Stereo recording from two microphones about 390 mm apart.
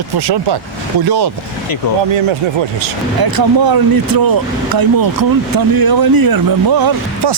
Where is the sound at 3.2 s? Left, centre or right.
Right.